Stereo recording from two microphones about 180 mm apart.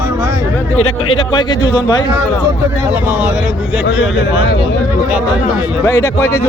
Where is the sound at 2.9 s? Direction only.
10° right (ahead or behind).